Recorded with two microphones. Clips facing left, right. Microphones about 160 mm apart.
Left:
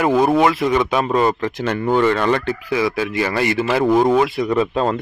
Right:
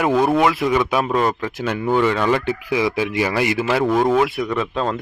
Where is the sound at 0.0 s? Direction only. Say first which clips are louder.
Left 2 dB; centre (ahead or behind).